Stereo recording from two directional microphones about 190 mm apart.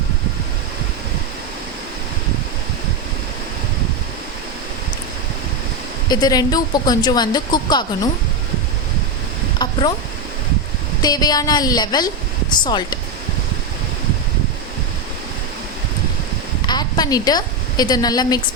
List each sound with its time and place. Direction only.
6.1 s speech: 20° left (ahead or behind)
9.6 s speech: 20° left (ahead or behind)
11.0 s speech: 20° left (ahead or behind)
16.6 s a woman's voice: 20° left (ahead or behind)